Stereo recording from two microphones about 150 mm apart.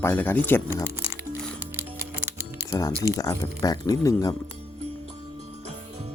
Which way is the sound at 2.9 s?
20° right (ahead or behind).